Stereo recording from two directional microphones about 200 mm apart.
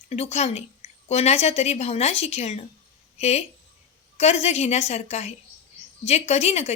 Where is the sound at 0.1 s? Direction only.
30° left (ahead or behind).